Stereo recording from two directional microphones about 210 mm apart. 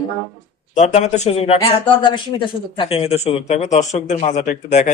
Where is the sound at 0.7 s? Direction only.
35° left (ahead or behind).